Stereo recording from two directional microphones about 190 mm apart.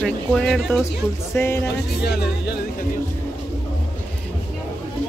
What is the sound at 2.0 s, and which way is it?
Speech, 55° left (ahead or behind).